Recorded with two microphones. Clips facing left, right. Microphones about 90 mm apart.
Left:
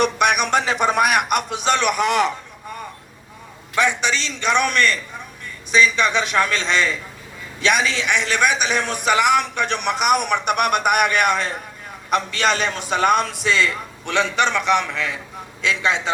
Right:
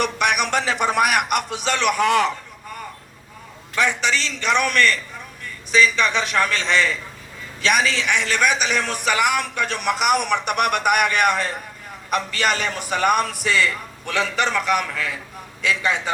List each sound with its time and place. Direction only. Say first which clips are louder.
0.0 s a man's voice: left 3 dB; 20° left (ahead or behind)
3.8 s a man's voice: left 1 dB; 20° left (ahead or behind)